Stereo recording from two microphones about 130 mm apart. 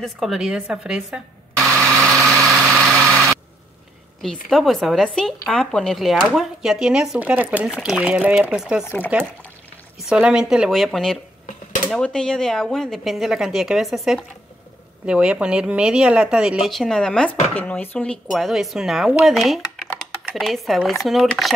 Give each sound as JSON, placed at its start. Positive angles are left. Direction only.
{"t": 0.0, "sound": "speech", "side_deg": 0}
{"t": 2.6, "sound": "vehicle", "side_deg": -20}
{"t": 4.2, "sound": "speech", "side_deg": 0}
{"t": 8.8, "sound": "speech", "side_deg": 15}
{"t": 9.9, "sound": "speech", "side_deg": -5}
{"t": 18.3, "sound": "speech", "side_deg": 0}